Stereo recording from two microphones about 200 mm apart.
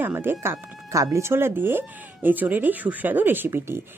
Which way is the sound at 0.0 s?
10° right (ahead or behind).